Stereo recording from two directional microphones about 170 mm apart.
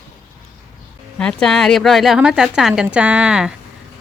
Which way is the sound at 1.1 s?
5° left (ahead or behind).